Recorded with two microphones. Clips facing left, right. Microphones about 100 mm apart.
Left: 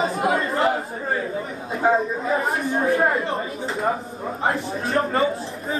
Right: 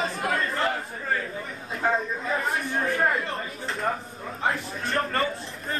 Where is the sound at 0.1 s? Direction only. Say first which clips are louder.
Left 6 dB; 30° left (ahead or behind).